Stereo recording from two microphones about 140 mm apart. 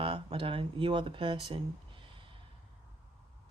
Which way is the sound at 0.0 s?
35° right (ahead or behind).